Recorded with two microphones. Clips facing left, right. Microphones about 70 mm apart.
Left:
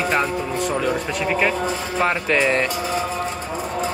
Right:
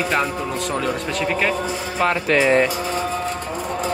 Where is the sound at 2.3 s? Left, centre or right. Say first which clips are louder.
Right 5 dB; right.